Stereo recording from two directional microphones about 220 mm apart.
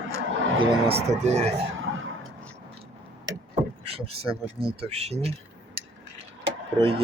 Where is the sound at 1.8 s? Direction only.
65° right (ahead or behind).